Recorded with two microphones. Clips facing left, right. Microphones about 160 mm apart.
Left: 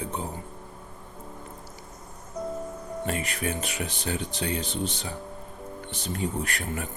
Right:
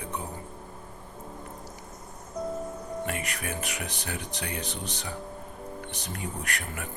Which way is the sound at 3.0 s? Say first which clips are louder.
Left 6 dB; 25° left (ahead or behind).